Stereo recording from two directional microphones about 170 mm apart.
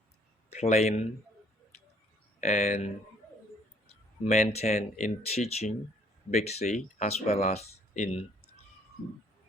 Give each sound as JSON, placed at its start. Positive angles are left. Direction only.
{"t": 0.5, "sound": "speech", "side_deg": 40}
{"t": 2.4, "sound": "speech", "side_deg": 45}
{"t": 4.2, "sound": "speech", "side_deg": 40}